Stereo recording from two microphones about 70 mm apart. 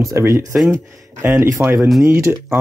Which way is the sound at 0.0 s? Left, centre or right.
Right.